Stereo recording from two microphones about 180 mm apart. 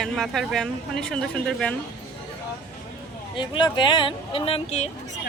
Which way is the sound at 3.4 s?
25° left (ahead or behind).